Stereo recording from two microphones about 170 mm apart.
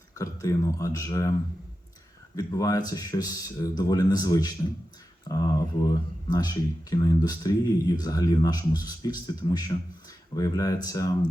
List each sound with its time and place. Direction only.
0.2 s speech: 20° left (ahead or behind)
2.3 s speech: 20° left (ahead or behind)